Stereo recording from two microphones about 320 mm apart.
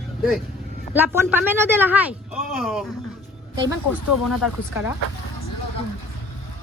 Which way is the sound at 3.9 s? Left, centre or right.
Left.